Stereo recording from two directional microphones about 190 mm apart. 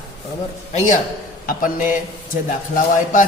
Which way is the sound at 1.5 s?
45° left (ahead or behind).